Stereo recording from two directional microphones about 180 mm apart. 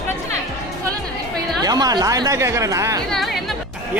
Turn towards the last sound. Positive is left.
turn(degrees=0)  # may be behind; listen again after turning